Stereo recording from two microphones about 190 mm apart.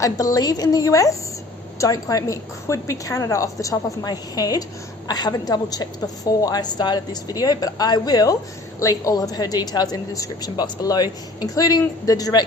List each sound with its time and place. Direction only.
0.0 s a woman's voice: 20° left (ahead or behind)